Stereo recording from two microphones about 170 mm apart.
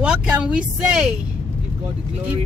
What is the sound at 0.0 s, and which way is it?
Speech, 5° right (ahead or behind).